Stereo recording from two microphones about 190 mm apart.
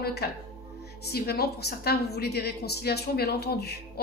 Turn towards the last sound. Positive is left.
turn(degrees=55)  # may be behind; listen again after turning